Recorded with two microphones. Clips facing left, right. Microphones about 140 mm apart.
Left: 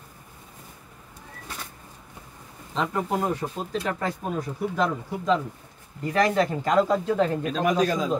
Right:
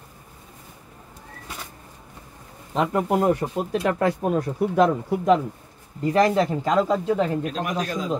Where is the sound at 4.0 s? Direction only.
65° right (ahead or behind).